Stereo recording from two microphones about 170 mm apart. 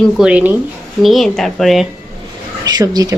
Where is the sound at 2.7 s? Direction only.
25° right (ahead or behind).